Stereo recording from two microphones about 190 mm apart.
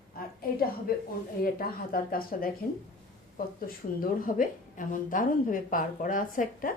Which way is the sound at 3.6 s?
50° left (ahead or behind).